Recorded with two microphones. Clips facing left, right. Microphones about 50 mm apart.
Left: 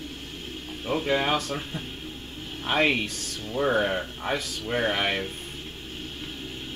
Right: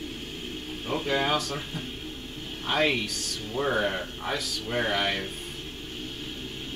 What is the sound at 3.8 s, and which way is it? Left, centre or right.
Speech, centre.